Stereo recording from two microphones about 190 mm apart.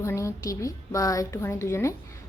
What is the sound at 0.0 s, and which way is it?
A woman's voice, 15° left (ahead or behind).